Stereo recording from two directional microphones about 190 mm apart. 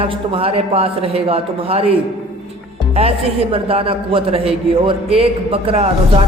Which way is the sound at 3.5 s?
30° right (ahead or behind).